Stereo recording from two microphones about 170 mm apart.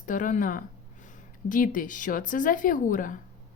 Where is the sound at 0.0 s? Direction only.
50° left (ahead or behind).